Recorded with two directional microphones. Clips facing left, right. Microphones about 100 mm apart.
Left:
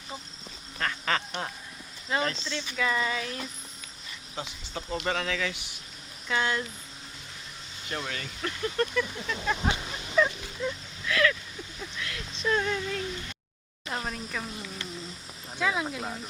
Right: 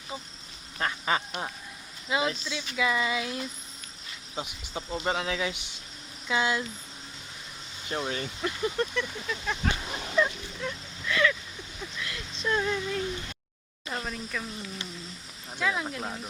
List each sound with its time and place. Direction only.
0.8 s duck: 15° right (ahead or behind)
2.0 s speech: 10° right (ahead or behind)
4.4 s speech: 15° right (ahead or behind)
6.2 s speech: 10° right (ahead or behind)
7.9 s speech: 25° right (ahead or behind)
8.4 s speech: 15° right (ahead or behind)
9.0 s speech: centre (ahead or behind)
10.2 s a sound: centre (ahead or behind)
11.9 s speech: centre (ahead or behind)
15.6 s speech: 5° left (ahead or behind)